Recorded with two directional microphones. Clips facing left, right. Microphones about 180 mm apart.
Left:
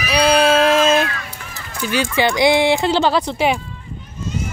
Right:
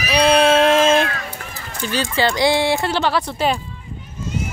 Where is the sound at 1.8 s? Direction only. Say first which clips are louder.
Left 2 dB; 15° left (ahead or behind).